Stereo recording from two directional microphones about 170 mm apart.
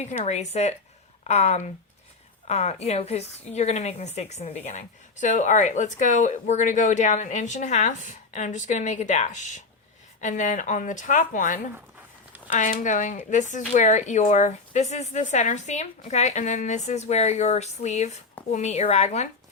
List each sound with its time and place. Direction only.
0.3 s a woman's voice: 40° left (ahead or behind)